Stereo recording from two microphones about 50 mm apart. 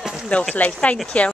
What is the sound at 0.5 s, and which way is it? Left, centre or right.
Speech, left.